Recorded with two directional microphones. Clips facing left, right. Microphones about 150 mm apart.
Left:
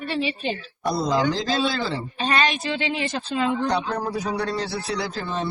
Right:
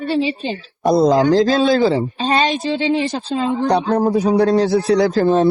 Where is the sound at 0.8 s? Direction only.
45° right (ahead or behind).